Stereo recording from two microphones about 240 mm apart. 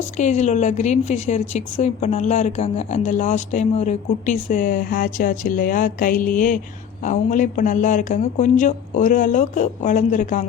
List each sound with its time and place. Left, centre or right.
0.2 s a woman's voice: left